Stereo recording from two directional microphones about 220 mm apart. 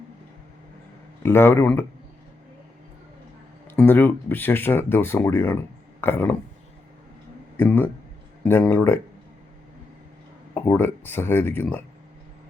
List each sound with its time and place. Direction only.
1.2 s speech: 10° left (ahead or behind)
3.8 s speech: 10° left (ahead or behind)
7.5 s speech: 10° left (ahead or behind)
10.5 s speech: 10° left (ahead or behind)